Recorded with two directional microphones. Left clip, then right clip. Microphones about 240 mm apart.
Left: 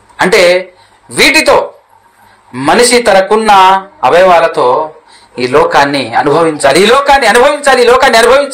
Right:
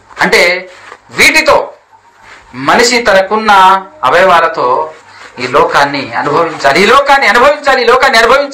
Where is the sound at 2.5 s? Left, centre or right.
Left.